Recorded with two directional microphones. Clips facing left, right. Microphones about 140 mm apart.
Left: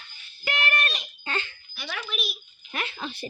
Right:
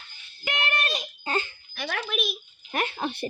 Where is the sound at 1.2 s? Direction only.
40° right (ahead or behind).